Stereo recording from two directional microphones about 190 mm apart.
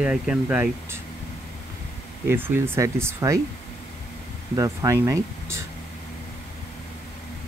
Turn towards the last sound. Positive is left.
turn(degrees=-15)  # may be behind; listen again after turning